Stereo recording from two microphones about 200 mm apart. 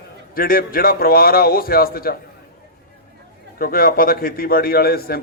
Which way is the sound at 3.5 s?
45° left (ahead or behind).